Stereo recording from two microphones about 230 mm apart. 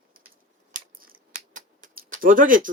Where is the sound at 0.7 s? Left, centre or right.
Right.